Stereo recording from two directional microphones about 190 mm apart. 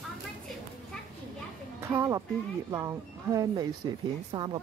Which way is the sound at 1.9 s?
20° right (ahead or behind).